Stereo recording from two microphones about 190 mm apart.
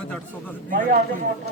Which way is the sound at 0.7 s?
45° right (ahead or behind).